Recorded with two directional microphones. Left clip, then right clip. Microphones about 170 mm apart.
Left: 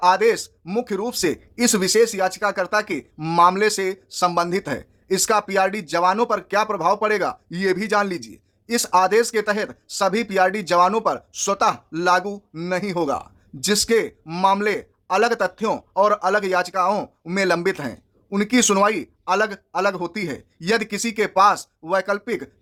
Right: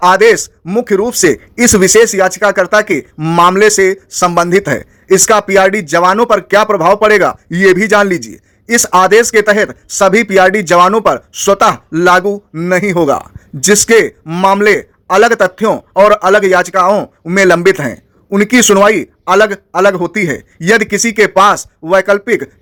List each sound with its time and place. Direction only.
0.0 s a man's voice: 25° right (ahead or behind)
16.9 s speech: 5° right (ahead or behind)
17.3 s a man's voice: 25° right (ahead or behind)